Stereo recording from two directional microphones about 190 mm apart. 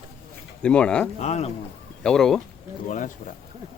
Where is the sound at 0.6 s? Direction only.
5° left (ahead or behind).